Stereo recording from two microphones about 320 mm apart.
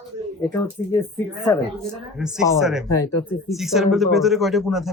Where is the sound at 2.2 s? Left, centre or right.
Centre.